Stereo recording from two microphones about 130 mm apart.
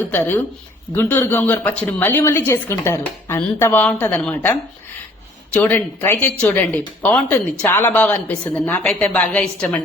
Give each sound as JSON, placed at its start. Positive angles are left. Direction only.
{"t": 0.1, "sound": "a woman's voice", "side_deg": 15}
{"t": 5.5, "sound": "a woman's voice", "side_deg": 15}